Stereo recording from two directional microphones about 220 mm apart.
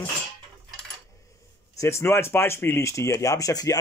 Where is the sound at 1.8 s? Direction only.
15° left (ahead or behind).